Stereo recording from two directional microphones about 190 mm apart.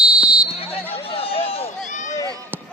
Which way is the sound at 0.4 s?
30° left (ahead or behind).